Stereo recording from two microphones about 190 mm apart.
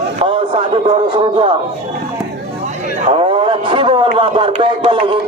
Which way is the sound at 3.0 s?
30° right (ahead or behind).